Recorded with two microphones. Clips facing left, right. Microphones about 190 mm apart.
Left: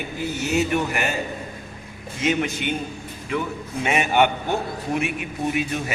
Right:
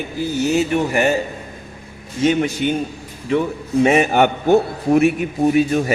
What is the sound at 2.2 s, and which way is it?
Speech, 35° right (ahead or behind).